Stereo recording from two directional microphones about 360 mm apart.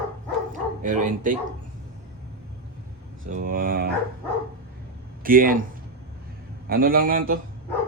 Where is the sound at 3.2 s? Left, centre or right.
Right.